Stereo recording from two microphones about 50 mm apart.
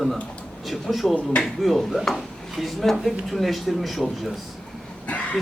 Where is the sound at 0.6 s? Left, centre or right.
Centre.